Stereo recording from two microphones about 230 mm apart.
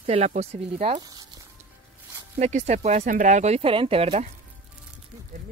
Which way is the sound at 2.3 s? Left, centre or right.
Right.